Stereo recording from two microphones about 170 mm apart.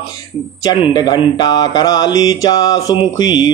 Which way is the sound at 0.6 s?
25° left (ahead or behind).